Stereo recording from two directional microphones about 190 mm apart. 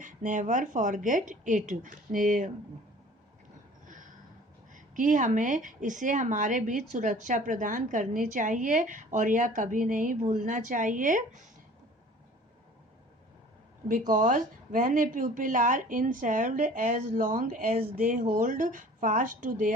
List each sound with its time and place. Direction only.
0.0 s a woman's voice: 45° right (ahead or behind)
4.7 s a woman's voice: 45° right (ahead or behind)
14.1 s a woman's voice: 45° right (ahead or behind)